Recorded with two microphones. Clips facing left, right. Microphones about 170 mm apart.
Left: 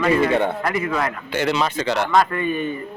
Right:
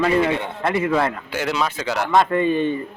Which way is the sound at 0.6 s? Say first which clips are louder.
Right 3 dB; 25° right (ahead or behind).